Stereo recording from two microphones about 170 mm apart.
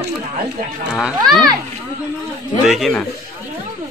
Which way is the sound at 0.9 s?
Centre (ahead or behind).